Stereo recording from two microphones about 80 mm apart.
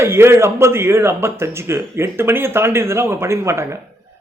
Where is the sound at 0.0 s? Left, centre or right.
Right.